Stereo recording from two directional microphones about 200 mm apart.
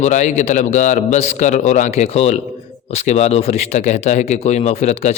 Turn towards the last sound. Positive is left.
turn(degrees=35)  # may be behind; listen again after turning